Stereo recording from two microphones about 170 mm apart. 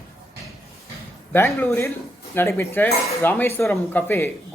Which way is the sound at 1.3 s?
15° left (ahead or behind).